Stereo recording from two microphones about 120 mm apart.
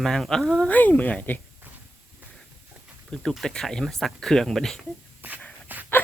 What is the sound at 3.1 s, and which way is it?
Speech, 5° left (ahead or behind).